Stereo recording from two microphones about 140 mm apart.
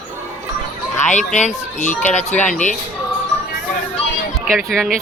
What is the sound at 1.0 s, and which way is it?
Speech, 60° left (ahead or behind).